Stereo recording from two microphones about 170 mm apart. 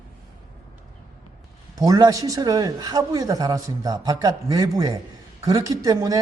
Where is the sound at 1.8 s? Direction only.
20° right (ahead or behind).